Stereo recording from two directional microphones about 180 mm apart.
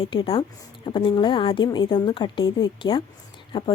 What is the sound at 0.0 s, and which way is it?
A woman's voice, 30° left (ahead or behind).